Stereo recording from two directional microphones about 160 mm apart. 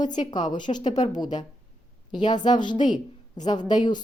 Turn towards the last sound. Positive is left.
turn(degrees=25)  # may be behind; listen again after turning